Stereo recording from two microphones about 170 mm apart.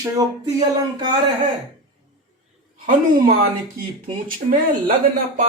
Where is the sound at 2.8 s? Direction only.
55° right (ahead or behind).